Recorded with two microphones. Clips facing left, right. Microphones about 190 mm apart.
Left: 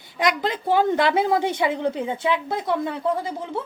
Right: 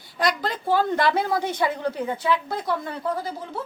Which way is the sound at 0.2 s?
20° left (ahead or behind).